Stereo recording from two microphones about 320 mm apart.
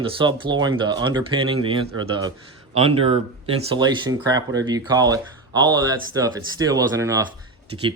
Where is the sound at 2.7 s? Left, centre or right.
Centre.